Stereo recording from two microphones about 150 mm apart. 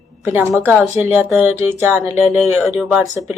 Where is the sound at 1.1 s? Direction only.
10° right (ahead or behind).